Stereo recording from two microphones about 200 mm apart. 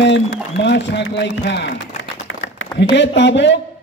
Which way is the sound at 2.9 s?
60° left (ahead or behind).